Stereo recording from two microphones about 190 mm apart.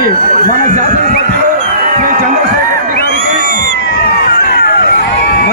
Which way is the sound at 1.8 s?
45° right (ahead or behind).